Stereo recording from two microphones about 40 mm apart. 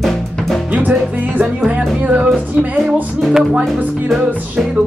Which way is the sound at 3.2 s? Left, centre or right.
Centre.